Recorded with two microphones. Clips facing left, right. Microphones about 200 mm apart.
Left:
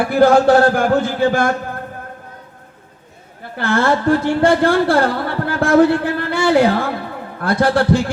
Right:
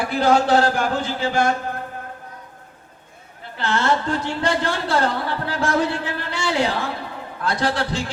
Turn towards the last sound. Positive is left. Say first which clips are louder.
# left 8 dB
turn(degrees=55)  # may be behind; listen again after turning